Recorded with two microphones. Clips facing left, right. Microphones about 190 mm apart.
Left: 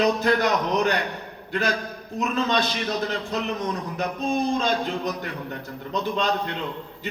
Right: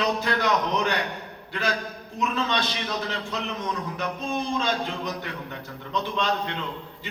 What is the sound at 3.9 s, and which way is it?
Speech, 45° left (ahead or behind).